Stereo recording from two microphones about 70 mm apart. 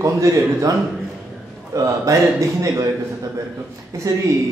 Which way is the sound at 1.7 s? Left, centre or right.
Right.